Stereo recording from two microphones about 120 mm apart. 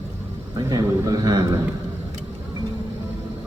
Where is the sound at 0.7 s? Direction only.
30° right (ahead or behind).